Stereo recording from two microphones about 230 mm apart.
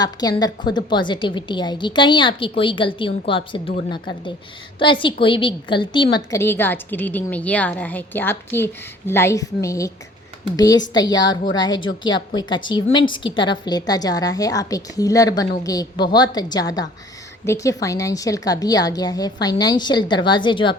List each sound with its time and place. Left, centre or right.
0.0 s a woman's voice: centre
4.8 s a woman's voice: left